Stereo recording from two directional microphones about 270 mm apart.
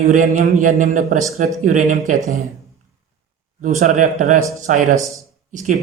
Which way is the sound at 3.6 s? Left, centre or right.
Right.